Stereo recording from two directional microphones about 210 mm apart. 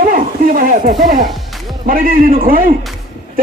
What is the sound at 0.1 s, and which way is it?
A man's voice, 40° right (ahead or behind).